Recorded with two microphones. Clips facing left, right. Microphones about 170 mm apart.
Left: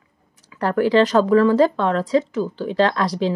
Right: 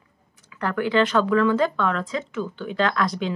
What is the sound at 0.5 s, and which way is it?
Speech, 35° left (ahead or behind).